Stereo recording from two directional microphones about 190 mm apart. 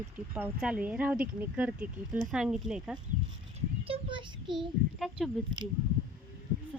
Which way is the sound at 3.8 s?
25° right (ahead or behind).